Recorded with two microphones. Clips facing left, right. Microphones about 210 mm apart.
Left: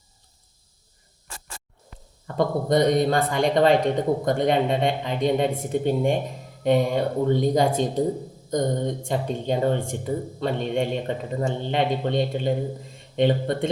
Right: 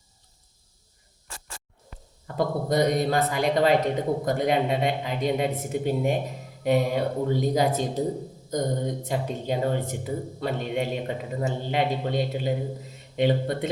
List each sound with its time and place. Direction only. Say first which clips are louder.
2.2 s speech: left 3 dB; 5° right (ahead or behind)